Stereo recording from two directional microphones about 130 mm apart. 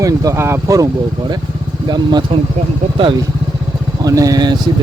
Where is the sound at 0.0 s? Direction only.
25° right (ahead or behind).